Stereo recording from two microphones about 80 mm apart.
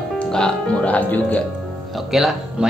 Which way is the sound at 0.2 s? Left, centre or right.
Centre.